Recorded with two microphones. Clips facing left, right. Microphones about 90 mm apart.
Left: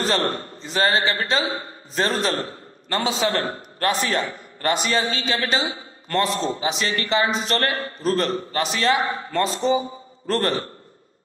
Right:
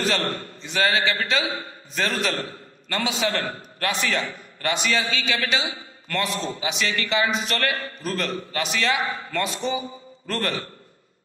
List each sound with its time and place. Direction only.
0.0 s a man's voice: 35° left (ahead or behind)